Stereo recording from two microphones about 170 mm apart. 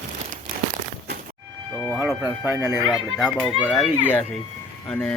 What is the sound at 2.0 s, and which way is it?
Speech, 15° right (ahead or behind).